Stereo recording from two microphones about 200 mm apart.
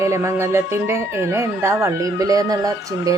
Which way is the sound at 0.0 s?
15° right (ahead or behind).